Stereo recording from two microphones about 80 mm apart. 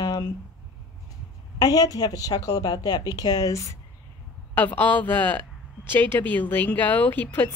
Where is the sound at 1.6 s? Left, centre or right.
Left.